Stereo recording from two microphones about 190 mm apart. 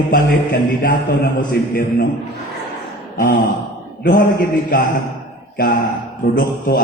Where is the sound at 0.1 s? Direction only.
45° left (ahead or behind).